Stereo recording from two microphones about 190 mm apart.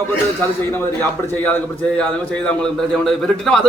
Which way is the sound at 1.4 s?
10° left (ahead or behind).